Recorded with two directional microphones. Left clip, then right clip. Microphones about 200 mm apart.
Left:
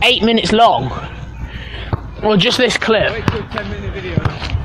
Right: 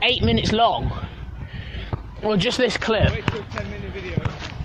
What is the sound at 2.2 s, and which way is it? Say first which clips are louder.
Speech: left 8 dB; 10° right (ahead or behind).